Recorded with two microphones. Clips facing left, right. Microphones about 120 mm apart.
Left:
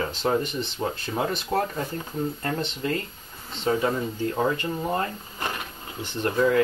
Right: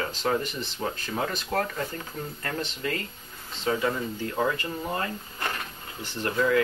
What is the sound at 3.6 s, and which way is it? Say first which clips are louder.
Speech: left 3 dB; 30° left (ahead or behind).